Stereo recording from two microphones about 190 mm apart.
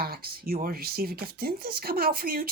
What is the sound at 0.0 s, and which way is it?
Speech, 50° right (ahead or behind).